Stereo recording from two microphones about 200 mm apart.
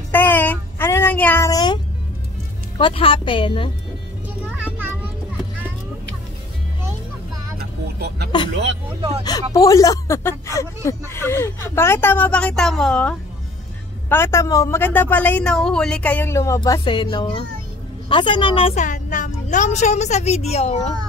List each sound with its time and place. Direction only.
0.1 s child singing: 10° left (ahead or behind)
2.8 s speech: 25° left (ahead or behind)
4.6 s children playing: 10° right (ahead or behind)
9.2 s a woman's voice: 20° left (ahead or behind)